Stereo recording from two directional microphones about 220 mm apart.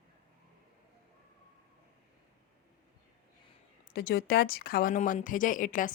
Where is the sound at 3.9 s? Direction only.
45° left (ahead or behind).